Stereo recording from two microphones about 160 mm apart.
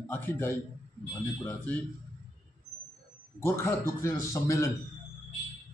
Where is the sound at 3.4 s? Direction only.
15° left (ahead or behind).